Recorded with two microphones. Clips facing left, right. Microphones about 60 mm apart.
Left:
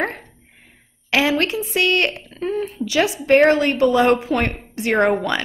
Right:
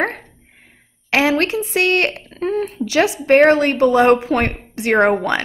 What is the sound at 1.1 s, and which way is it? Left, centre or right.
A woman's voice, right.